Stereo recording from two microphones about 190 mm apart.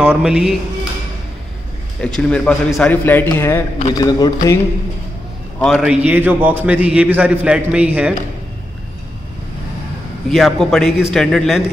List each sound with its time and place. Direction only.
0.0 s a man's voice: 5° right (ahead or behind)
2.0 s a man's voice: 5° left (ahead or behind)
5.6 s a man's voice: centre (ahead or behind)
10.3 s a man's voice: centre (ahead or behind)